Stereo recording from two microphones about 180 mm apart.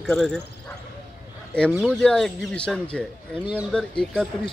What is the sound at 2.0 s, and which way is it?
Speech, 5° left (ahead or behind).